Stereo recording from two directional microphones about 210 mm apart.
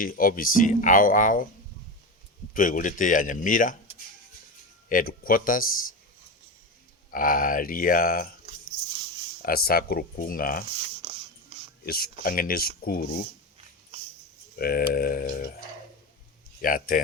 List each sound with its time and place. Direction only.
0.0 s speech: 40° left (ahead or behind)
2.5 s speech: 40° left (ahead or behind)
4.9 s speech: 40° left (ahead or behind)
7.1 s speech: 40° left (ahead or behind)
9.4 s speech: 45° left (ahead or behind)
11.0 s writing: 25° right (ahead or behind)
11.9 s speech: 45° left (ahead or behind)
14.5 s speech: 45° left (ahead or behind)
16.6 s speech: 40° left (ahead or behind)